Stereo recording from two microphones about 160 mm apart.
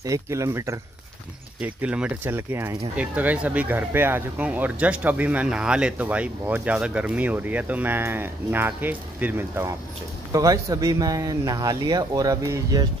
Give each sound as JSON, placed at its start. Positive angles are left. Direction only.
{"t": 0.0, "sound": "speech", "side_deg": -20}